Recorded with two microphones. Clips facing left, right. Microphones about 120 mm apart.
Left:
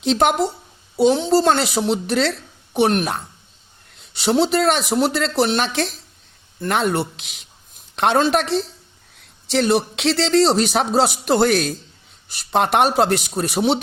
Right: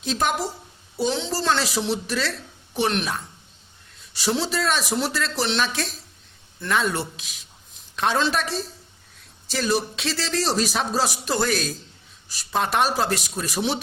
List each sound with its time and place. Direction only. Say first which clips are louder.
0.0 s a woman's voice: left 7 dB; 65° left (ahead or behind)
2.7 s a man's voice: left 6 dB; 55° left (ahead or behind)